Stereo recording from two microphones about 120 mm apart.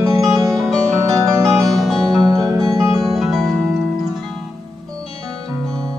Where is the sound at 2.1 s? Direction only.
35° right (ahead or behind).